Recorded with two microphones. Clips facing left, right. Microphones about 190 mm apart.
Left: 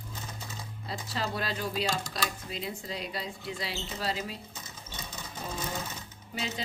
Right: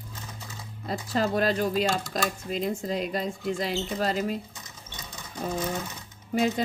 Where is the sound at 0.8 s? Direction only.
45° right (ahead or behind).